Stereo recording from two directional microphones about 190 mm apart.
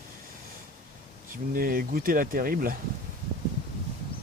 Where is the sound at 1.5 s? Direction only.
50° right (ahead or behind).